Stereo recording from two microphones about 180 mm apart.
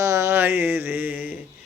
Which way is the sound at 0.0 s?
15° right (ahead or behind).